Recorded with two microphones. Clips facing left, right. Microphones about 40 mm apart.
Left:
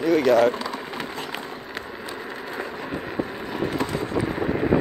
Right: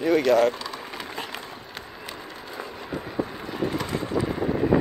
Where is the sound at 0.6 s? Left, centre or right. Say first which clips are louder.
Left 4 dB; centre.